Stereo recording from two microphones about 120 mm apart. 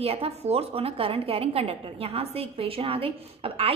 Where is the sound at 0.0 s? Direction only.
55° right (ahead or behind).